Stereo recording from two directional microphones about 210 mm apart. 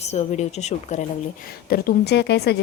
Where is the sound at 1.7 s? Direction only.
50° left (ahead or behind).